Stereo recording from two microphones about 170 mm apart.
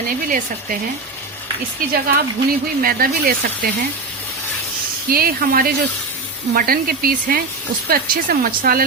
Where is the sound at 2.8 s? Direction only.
55° right (ahead or behind).